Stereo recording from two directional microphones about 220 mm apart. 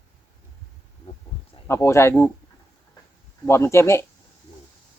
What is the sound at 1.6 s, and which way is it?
Speech, 10° left (ahead or behind).